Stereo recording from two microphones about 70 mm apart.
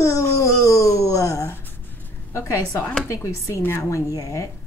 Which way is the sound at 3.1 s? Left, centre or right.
Left.